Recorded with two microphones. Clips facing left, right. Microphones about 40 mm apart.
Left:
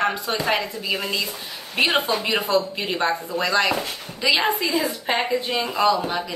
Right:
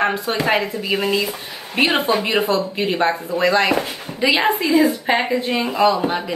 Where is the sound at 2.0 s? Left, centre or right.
Right.